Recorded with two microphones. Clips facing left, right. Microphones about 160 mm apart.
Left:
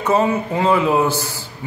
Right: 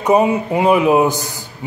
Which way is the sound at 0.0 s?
15° right (ahead or behind).